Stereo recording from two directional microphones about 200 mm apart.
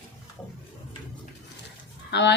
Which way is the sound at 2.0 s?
60° left (ahead or behind).